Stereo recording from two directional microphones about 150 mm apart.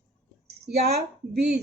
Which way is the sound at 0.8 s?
90° right.